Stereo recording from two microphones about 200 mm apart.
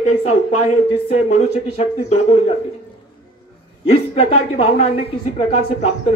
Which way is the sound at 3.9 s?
35° left (ahead or behind).